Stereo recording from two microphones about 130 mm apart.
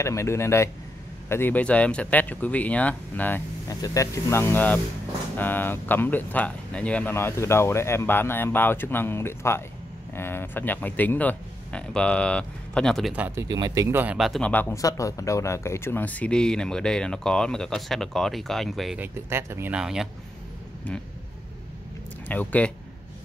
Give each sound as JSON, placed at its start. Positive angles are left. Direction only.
{"t": 0.0, "sound": "speech", "side_deg": 20}
{"t": 3.6, "sound": "speech", "side_deg": 25}
{"t": 13.1, "sound": "speech", "side_deg": -10}
{"t": 13.4, "sound": "speech", "side_deg": -30}
{"t": 13.8, "sound": "speech", "side_deg": -15}
{"t": 14.1, "sound": "speech", "side_deg": 0}
{"t": 14.4, "sound": "speech", "side_deg": 15}
{"t": 14.8, "sound": "speech", "side_deg": 25}
{"t": 18.9, "sound": "speech", "side_deg": -20}
{"t": 19.8, "sound": "speech", "side_deg": -5}
{"t": 22.3, "sound": "speech", "side_deg": 10}